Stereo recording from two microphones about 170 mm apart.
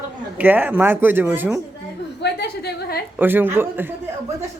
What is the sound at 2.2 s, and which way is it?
Speech, 70° left (ahead or behind).